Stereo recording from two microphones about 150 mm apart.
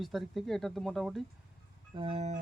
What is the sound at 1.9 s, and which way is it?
Speech, 40° right (ahead or behind).